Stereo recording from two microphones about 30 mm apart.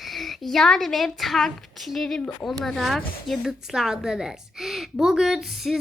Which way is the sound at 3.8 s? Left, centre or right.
Centre.